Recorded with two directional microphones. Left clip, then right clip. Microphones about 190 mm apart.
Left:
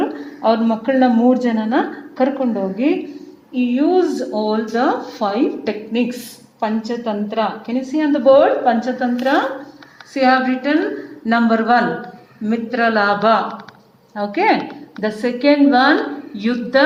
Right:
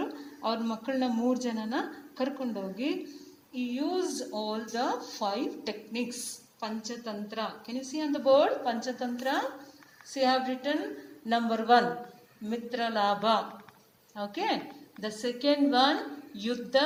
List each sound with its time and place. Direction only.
0.0 s speech: 55° right (ahead or behind)
10.2 s speech: 50° right (ahead or behind)